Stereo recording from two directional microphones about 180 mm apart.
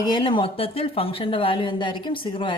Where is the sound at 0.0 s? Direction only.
25° left (ahead or behind).